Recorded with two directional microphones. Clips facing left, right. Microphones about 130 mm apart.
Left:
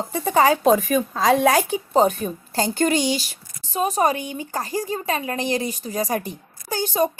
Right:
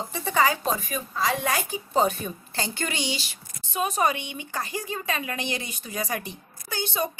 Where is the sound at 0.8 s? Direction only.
90° left.